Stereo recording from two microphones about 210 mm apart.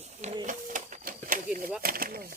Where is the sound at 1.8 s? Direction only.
45° right (ahead or behind).